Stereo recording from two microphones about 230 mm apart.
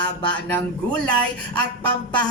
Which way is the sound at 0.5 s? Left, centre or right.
Centre.